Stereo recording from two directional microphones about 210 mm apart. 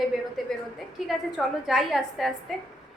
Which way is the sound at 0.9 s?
Centre (ahead or behind).